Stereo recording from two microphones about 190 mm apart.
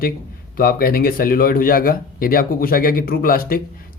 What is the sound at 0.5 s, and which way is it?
Speech, 50° left (ahead or behind).